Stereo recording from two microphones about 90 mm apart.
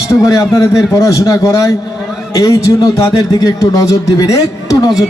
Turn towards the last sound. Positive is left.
turn(degrees=40)  # may be behind; listen again after turning